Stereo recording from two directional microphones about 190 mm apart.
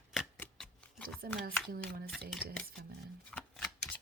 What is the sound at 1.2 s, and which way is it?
Speech, 55° right (ahead or behind).